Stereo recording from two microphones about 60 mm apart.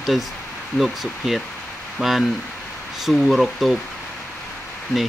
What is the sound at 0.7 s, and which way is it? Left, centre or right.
Speech, centre.